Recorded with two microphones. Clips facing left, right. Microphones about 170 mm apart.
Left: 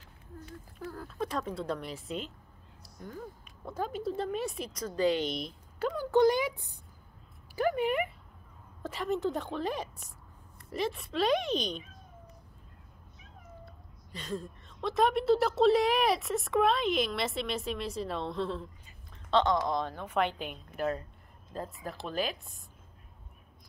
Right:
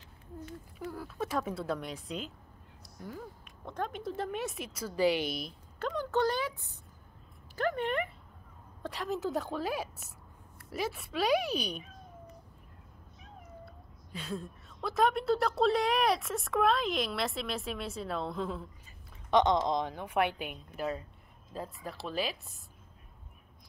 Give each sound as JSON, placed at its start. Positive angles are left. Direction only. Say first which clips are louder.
{"t": 0.7, "sound": "a woman's voice", "louder": "left 1 dB", "side_deg": -10}
{"t": 5.8, "sound": "a woman's voice", "louder": "left 5 dB", "side_deg": 10}
{"t": 14.1, "sound": "a woman's voice", "louder": "left 1 dB", "side_deg": -5}
{"t": 19.3, "sound": "a woman's voice", "louder": "right 1 dB", "side_deg": -20}
{"t": 21.5, "sound": "a woman's voice", "louder": "left 1 dB", "side_deg": 0}